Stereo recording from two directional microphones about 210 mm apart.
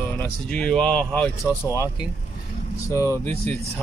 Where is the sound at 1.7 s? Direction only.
15° left (ahead or behind).